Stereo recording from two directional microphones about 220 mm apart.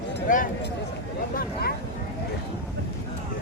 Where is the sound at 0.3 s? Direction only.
35° left (ahead or behind).